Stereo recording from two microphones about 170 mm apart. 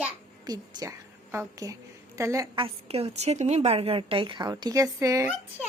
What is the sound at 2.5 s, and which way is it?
A woman's voice, 35° right (ahead or behind).